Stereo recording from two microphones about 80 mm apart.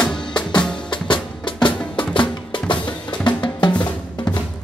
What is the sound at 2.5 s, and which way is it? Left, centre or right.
Drum, left.